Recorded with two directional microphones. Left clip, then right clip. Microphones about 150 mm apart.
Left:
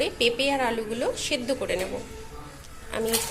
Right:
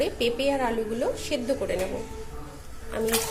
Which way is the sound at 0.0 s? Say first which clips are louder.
Left 1 dB; 10° right (ahead or behind).